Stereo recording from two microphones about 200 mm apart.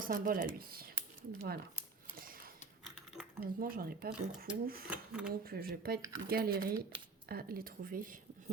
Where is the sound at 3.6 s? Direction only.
45° right (ahead or behind).